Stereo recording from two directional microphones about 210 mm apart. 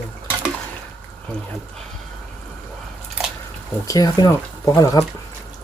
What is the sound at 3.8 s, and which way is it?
Speech, 15° left (ahead or behind).